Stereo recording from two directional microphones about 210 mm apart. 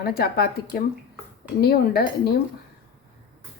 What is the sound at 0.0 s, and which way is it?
Speech, 45° left (ahead or behind).